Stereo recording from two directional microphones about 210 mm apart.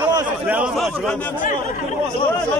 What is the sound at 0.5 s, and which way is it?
Speech, 5° right (ahead or behind).